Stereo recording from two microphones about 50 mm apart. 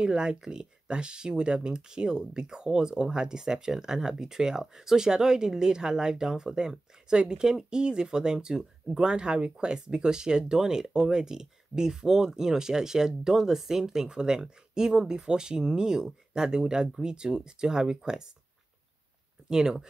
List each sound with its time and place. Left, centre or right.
0.0 s speech: centre
19.5 s speech: centre